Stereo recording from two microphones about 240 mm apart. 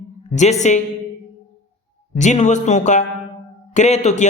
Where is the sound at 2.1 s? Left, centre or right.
Left.